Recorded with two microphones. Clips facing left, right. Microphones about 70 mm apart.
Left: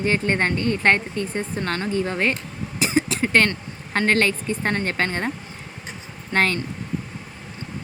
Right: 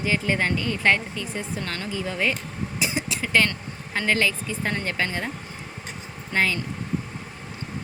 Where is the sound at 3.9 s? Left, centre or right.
Left.